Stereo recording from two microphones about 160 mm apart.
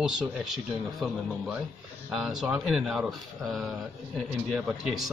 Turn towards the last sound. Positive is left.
turn(degrees=0)  # may be behind; listen again after turning